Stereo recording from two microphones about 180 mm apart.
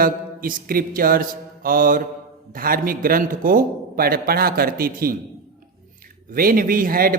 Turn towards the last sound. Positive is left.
turn(degrees=-55)  # may be behind; listen again after turning